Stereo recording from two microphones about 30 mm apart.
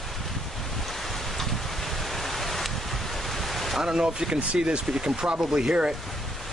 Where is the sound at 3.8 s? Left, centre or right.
Centre.